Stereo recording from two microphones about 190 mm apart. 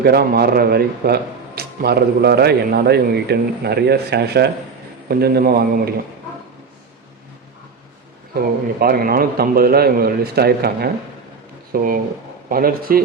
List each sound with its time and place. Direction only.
0.0 s a man's voice: 55° right (ahead or behind)
8.4 s a man's voice: 50° right (ahead or behind)